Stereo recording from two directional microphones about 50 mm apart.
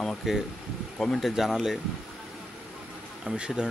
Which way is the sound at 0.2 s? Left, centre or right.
Centre.